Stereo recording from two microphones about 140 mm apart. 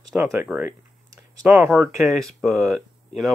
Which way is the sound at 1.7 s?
Centre (ahead or behind).